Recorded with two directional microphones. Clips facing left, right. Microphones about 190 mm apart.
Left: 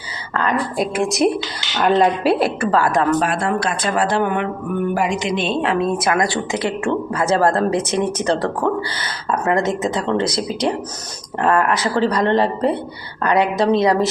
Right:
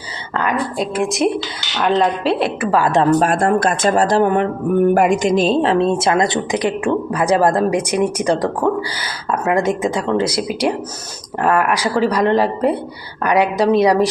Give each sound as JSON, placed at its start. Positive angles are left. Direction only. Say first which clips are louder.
{"t": 0.8, "sound": "a woman's voice", "louder": "left 1 dB", "side_deg": 0}
{"t": 2.6, "sound": "speech", "louder": "right 2 dB", "side_deg": -15}
{"t": 2.9, "sound": "speech", "louder": "right 3 dB", "side_deg": -30}
{"t": 3.2, "sound": "speech", "louder": "right 4 dB", "side_deg": -45}